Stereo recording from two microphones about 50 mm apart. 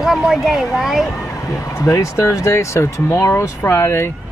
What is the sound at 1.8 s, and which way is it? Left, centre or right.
Speech, left.